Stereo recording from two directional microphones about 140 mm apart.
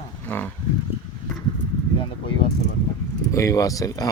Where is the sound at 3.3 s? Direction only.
25° left (ahead or behind).